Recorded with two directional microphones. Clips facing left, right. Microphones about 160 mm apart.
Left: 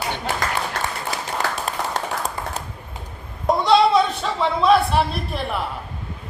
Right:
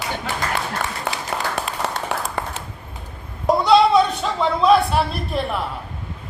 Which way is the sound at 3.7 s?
Centre (ahead or behind).